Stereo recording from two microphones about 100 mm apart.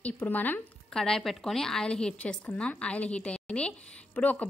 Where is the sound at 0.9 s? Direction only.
5° left (ahead or behind).